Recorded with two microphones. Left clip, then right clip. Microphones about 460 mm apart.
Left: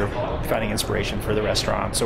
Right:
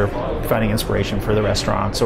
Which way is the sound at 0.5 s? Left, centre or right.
Right.